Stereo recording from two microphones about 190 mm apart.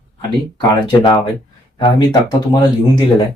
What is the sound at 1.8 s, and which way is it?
Speech, 20° left (ahead or behind).